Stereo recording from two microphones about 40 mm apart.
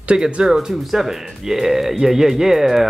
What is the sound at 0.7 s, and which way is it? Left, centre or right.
Speech, centre.